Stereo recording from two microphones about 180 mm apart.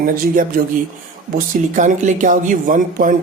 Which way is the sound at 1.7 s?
45° right (ahead or behind).